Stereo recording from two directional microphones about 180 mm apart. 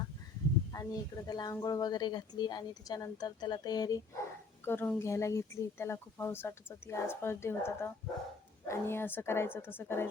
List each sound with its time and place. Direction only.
0.7 s a woman's voice: 20° left (ahead or behind)